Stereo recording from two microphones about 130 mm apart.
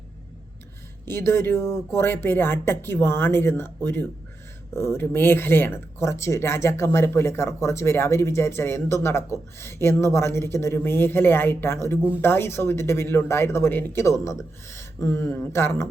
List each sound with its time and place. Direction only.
1.0 s speech: 20° left (ahead or behind)